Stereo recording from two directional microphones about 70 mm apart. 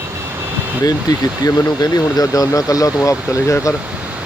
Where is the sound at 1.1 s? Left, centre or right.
Left.